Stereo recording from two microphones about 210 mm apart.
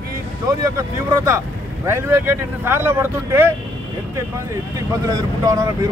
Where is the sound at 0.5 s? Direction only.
15° right (ahead or behind).